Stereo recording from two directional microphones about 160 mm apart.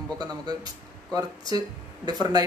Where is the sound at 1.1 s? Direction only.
25° right (ahead or behind).